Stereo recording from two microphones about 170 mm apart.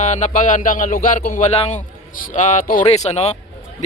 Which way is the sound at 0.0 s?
45° left (ahead or behind).